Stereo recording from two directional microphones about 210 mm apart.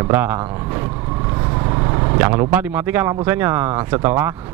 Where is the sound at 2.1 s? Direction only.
15° right (ahead or behind).